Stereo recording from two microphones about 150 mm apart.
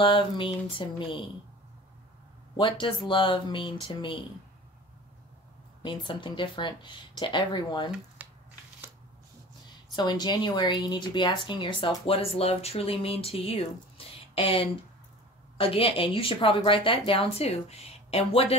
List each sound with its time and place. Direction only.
0.0 s speech: 35° left (ahead or behind)
2.5 s speech: 30° left (ahead or behind)
5.8 s speech: 30° left (ahead or behind)
8.2 s squish: 10° right (ahead or behind)
9.9 s speech: 25° left (ahead or behind)